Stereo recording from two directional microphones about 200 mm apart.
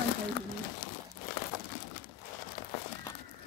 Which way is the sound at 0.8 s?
55° left (ahead or behind).